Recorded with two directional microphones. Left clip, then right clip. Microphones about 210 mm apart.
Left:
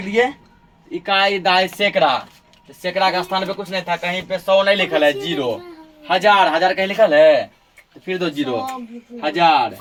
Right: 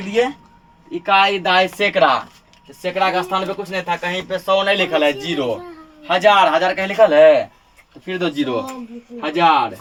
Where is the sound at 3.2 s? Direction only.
10° right (ahead or behind).